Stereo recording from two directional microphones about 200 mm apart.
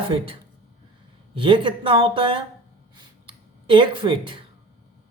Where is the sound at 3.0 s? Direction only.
25° right (ahead or behind).